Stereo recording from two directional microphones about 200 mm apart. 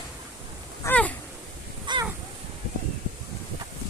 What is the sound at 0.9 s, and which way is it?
Speech, 5° left (ahead or behind).